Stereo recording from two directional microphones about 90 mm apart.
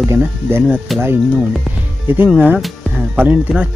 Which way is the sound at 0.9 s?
Centre (ahead or behind).